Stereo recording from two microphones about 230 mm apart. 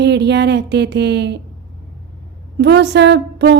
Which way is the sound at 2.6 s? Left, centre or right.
Right.